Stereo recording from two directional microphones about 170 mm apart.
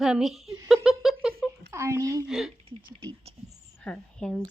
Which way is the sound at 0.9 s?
Centre (ahead or behind).